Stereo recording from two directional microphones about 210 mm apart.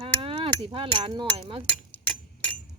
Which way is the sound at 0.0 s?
25° right (ahead or behind).